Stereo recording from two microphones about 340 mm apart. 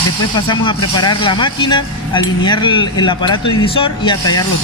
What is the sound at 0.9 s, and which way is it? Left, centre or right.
Speech, centre.